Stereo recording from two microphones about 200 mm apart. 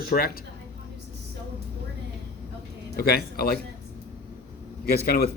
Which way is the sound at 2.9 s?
50° left (ahead or behind).